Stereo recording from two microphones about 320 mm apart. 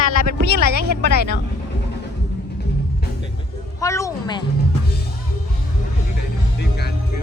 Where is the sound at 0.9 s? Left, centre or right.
Left.